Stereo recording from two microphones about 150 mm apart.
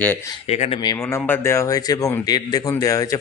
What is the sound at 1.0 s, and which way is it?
Speech, 15° left (ahead or behind).